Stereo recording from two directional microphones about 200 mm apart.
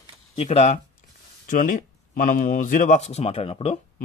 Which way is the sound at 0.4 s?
35° left (ahead or behind).